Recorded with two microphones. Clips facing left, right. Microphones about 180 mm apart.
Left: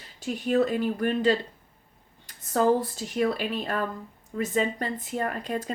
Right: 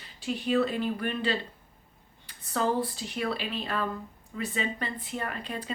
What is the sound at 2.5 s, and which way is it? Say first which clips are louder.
Speech: left 5 dB; 45° left (ahead or behind).